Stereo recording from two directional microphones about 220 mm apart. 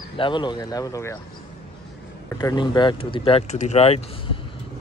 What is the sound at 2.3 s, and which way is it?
Speech, 20° left (ahead or behind).